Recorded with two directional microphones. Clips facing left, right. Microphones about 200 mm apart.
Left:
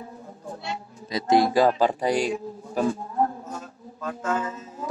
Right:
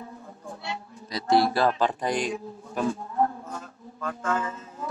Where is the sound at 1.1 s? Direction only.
20° left (ahead or behind).